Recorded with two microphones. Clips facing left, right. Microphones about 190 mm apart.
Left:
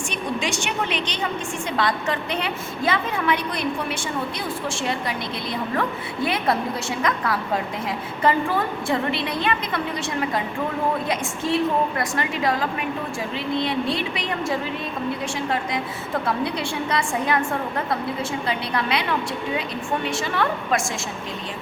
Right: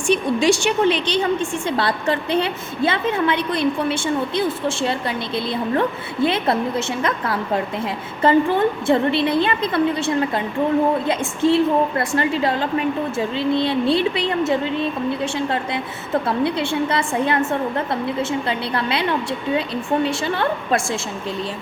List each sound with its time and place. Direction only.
0.1 s a woman's voice: 35° right (ahead or behind)
8.2 s a woman's voice: 30° right (ahead or behind)
11.0 s a woman's voice: 30° right (ahead or behind)
20.1 s a woman's voice: 30° right (ahead or behind)